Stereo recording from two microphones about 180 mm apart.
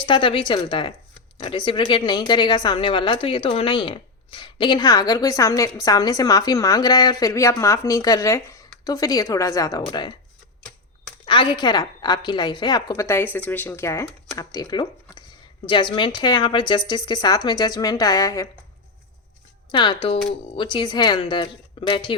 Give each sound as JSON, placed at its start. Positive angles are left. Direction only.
{"t": 0.0, "sound": "a woman's voice", "side_deg": 30}
{"t": 11.3, "sound": "a woman's voice", "side_deg": 25}
{"t": 19.7, "sound": "a woman's voice", "side_deg": 25}